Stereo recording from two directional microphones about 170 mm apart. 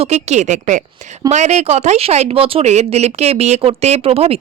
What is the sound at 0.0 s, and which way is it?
A woman's voice, 40° right (ahead or behind).